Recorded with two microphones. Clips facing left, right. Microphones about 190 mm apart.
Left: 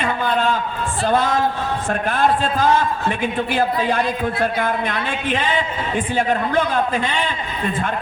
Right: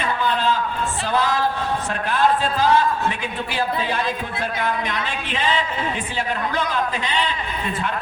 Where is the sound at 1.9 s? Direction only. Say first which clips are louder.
Left 2 dB; 50° left (ahead or behind).